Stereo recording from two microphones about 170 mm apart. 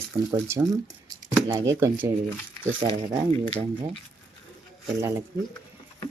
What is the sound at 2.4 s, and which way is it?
Speech, 10° left (ahead or behind).